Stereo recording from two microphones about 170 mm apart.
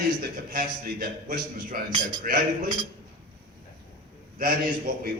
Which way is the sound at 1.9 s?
25° right (ahead or behind).